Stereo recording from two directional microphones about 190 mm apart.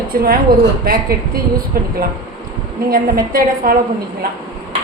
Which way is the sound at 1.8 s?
50° right (ahead or behind).